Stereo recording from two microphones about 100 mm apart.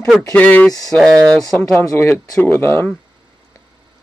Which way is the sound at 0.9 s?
5° left (ahead or behind).